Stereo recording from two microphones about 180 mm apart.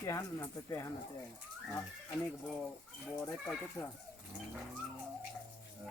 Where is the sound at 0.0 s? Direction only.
15° left (ahead or behind).